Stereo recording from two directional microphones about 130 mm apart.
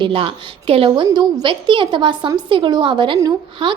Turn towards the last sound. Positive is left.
turn(degrees=-40)  # may be behind; listen again after turning